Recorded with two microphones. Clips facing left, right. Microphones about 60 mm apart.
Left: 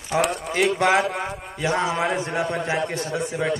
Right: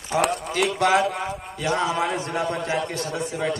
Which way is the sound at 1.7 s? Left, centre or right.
Left.